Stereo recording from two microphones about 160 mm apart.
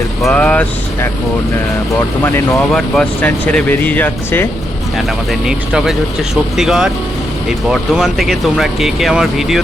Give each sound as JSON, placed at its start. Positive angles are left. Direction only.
{"t": 0.2, "sound": "speech", "side_deg": 5}
{"t": 2.2, "sound": "speech", "side_deg": 10}
{"t": 4.9, "sound": "speech", "side_deg": 0}